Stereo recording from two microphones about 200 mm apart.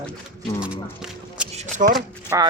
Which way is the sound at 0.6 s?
5° right (ahead or behind).